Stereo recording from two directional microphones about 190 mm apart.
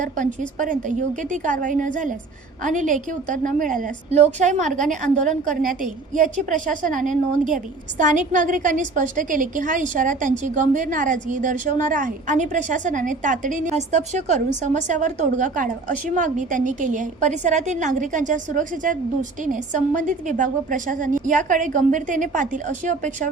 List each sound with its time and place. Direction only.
0.0 s a woman's voice: 40° right (ahead or behind)